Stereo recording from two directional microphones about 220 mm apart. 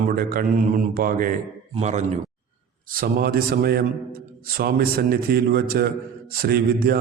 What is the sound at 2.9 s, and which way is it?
A man's voice, 45° right (ahead or behind).